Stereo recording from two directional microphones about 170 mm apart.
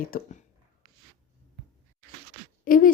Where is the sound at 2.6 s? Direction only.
55° left (ahead or behind).